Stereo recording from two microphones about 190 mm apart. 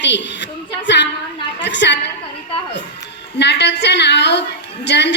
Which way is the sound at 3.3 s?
65° left (ahead or behind).